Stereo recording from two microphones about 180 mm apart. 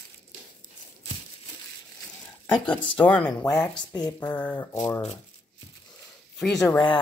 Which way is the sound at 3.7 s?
20° left (ahead or behind).